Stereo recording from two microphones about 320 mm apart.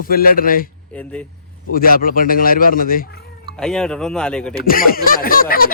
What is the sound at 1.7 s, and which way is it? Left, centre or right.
Speech, left.